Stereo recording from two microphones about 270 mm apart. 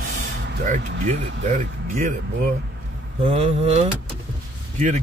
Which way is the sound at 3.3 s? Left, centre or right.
Right.